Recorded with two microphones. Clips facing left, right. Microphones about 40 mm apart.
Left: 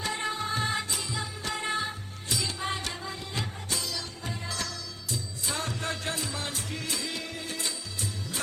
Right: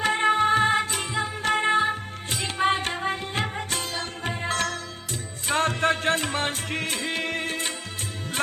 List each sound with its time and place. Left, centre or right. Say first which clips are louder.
0.0 s music: right 11 dB; right